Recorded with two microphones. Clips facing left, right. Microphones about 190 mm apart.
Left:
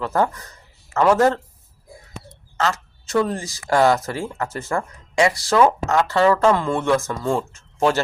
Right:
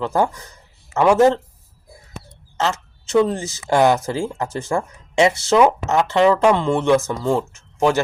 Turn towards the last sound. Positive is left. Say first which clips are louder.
# right 2 dB
turn(degrees=-10)  # may be behind; listen again after turning